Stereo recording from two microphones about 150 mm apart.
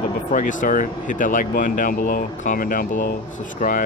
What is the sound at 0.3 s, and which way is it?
Speech, 60° left (ahead or behind).